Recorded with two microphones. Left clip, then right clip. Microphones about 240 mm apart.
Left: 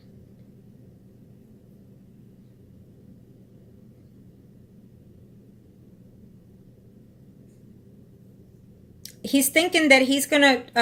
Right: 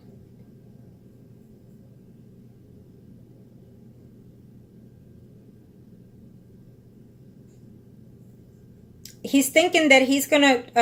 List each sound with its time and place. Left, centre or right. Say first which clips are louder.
9.0 s speech: right 1 dB; left